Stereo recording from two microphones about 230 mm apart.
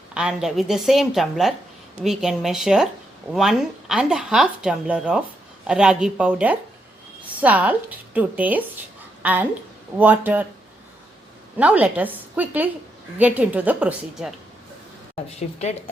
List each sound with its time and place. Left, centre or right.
0.1 s speech: centre
11.5 s speech: centre
15.1 s speech: left